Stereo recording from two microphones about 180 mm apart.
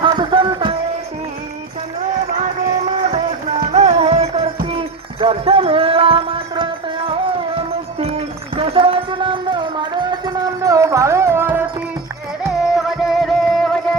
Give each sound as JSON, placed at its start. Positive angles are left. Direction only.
{"t": 0.0, "sound": "music", "side_deg": -30}
{"t": 3.1, "sound": "music", "side_deg": -40}
{"t": 7.9, "sound": "a sound", "side_deg": -30}
{"t": 12.7, "sound": "music", "side_deg": 0}